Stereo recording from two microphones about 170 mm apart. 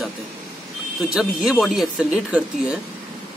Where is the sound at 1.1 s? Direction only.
5° right (ahead or behind).